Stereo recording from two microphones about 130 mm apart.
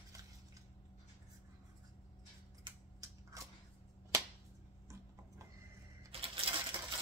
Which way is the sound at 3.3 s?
25° right (ahead or behind).